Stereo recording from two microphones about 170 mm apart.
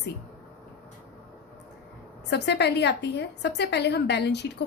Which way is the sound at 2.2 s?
90° left.